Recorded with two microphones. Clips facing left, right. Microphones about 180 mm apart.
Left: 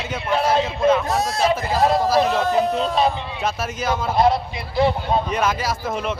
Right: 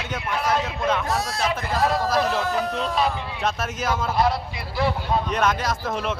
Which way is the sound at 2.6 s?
25° left (ahead or behind).